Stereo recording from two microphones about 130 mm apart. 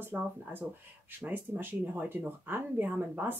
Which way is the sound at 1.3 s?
15° right (ahead or behind).